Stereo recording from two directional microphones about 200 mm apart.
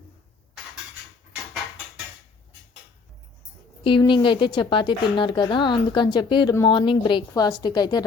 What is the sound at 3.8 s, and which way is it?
A woman's voice, 25° left (ahead or behind).